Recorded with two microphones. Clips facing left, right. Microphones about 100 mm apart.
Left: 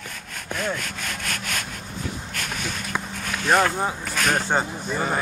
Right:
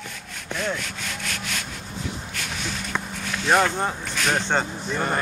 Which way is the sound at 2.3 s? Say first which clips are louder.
Left 1 dB; 50° left (ahead or behind).